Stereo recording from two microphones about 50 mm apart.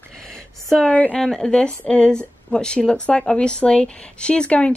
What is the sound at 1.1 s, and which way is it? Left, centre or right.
Speech, centre.